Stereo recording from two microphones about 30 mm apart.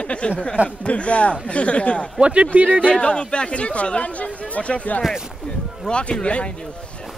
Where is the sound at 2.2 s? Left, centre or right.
Right.